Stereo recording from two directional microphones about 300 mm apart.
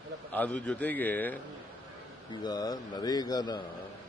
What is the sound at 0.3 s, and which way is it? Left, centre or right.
A man's voice, centre.